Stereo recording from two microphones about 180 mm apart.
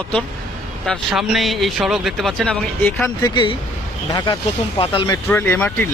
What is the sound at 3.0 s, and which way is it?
Speech, 20° left (ahead or behind).